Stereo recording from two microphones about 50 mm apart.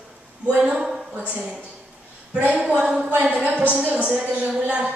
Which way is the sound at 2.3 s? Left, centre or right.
Right.